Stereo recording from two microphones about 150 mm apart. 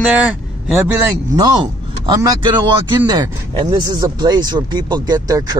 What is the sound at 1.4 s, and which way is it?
Speech, 25° right (ahead or behind).